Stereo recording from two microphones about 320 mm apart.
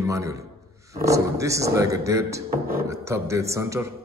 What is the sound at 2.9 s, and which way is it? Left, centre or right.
A man's voice, centre.